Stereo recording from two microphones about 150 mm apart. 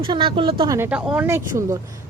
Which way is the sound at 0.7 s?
15° right (ahead or behind).